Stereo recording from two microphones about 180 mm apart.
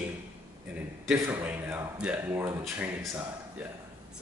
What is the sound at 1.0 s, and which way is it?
A man's voice, 10° right (ahead or behind).